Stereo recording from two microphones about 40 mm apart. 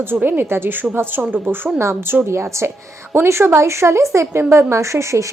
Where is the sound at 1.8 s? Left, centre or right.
Right.